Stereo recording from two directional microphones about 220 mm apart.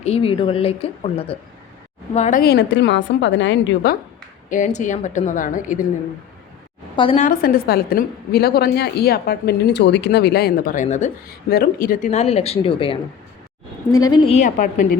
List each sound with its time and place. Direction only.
0.0 s a woman's voice: 25° left (ahead or behind); by 3.9 s 55° left (ahead or behind)
4.4 s a woman's voice: 35° left (ahead or behind)
6.9 s a woman's voice: 25° left (ahead or behind)
7.2 s a woman's voice: 40° left (ahead or behind); by 13.0 s 25° left (ahead or behind)
14.0 s speech: 20° left (ahead or behind); by 14.9 s 35° left (ahead or behind)